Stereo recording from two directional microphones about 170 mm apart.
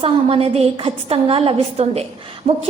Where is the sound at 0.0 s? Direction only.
35° right (ahead or behind).